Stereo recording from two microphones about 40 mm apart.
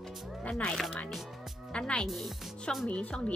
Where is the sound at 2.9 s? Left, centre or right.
Left.